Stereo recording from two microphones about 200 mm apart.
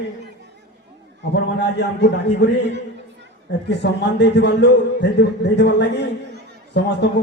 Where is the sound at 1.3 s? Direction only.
55° left (ahead or behind).